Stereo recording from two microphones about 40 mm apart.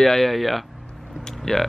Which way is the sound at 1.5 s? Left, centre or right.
Centre.